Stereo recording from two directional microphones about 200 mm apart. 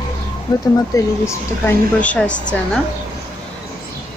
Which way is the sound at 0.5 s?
15° left (ahead or behind).